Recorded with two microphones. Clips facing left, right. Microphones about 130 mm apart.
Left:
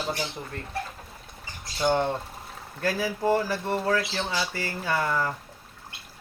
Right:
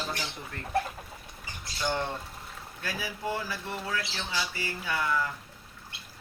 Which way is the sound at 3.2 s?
40° left (ahead or behind).